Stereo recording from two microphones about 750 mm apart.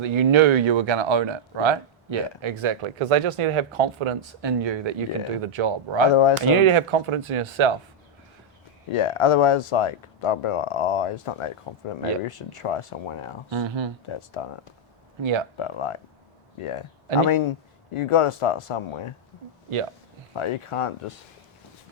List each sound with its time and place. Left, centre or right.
0.0 s speech: right
8.9 s speech: left
13.5 s speech: right
14.4 s speech: left
15.2 s speech: right
15.5 s speech: left
20.3 s speech: left